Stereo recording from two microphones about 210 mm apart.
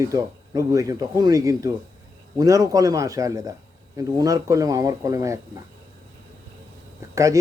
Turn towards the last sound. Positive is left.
turn(degrees=-15)  # may be behind; listen again after turning